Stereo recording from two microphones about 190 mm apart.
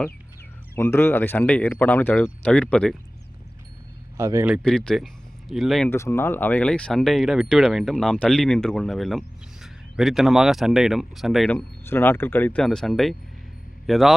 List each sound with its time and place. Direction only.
0.8 s speech: 10° left (ahead or behind)
4.2 s a man's voice: 15° right (ahead or behind)
4.5 s speech: 5° left (ahead or behind)
5.9 s speech: 15° left (ahead or behind)
11.5 s speech: 10° left (ahead or behind)